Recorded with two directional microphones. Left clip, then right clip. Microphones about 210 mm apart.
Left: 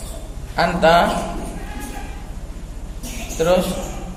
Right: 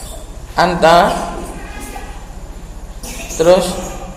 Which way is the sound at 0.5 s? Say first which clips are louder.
Right 5 dB; 20° right (ahead or behind).